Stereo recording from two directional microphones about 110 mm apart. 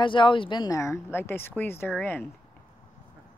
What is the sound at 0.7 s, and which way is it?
A woman's voice, 25° left (ahead or behind).